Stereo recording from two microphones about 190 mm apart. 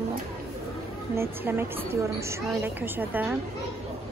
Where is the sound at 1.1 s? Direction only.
10° right (ahead or behind).